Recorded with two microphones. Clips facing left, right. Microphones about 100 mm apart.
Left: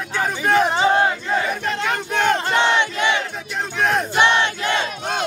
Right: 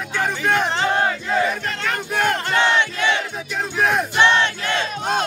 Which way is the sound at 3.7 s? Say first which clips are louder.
Even; 5° right (ahead or behind).